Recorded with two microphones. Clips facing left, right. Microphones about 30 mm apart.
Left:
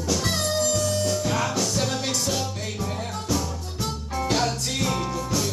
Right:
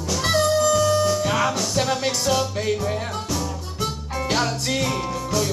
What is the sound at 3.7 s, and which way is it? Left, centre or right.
Music, right.